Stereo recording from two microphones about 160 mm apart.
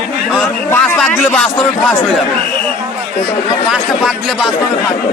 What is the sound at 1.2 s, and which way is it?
Speech, 10° left (ahead or behind).